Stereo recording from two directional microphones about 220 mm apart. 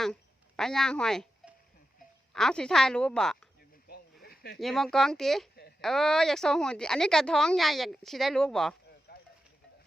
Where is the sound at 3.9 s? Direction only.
45° left (ahead or behind).